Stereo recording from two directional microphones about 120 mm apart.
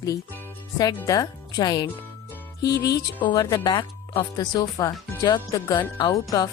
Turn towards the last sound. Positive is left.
turn(degrees=30)  # may be behind; listen again after turning